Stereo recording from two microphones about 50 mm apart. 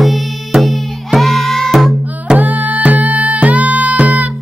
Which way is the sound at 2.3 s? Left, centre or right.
Right.